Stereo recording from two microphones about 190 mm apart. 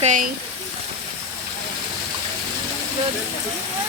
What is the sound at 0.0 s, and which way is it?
Speech, 40° right (ahead or behind).